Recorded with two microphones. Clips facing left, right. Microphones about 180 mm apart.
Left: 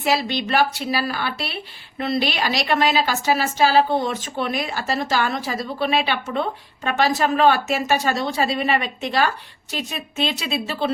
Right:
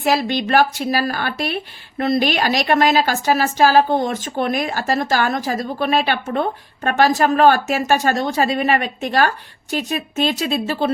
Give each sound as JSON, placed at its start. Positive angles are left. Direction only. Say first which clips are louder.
{"t": 0.0, "sound": "a woman's voice", "louder": "right 3 dB", "side_deg": -50}